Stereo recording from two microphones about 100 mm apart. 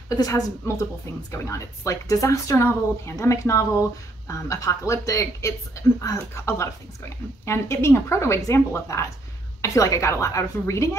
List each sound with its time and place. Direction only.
0.1 s speech: 35° left (ahead or behind)